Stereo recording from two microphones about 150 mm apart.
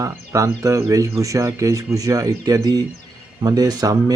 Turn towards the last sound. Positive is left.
turn(degrees=-25)  # may be behind; listen again after turning